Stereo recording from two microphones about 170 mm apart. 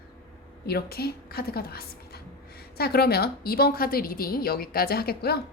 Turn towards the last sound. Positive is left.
turn(degrees=65)  # may be behind; listen again after turning